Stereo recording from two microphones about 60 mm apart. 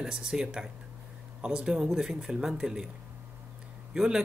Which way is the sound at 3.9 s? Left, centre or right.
Centre.